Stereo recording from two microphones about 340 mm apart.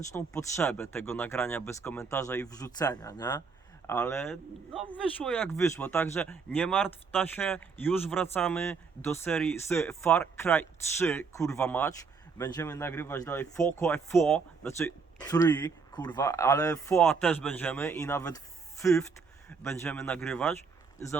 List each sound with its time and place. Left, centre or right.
0.1 s speech: centre